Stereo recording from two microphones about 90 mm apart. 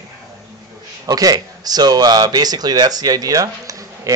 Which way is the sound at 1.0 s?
45° right (ahead or behind).